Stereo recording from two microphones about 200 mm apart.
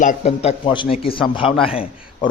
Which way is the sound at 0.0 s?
35° left (ahead or behind).